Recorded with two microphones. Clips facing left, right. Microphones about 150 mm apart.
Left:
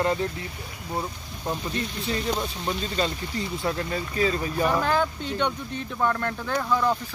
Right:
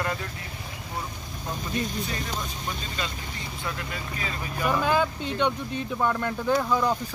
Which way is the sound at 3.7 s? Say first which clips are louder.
Left 4 dB; 35° left (ahead or behind).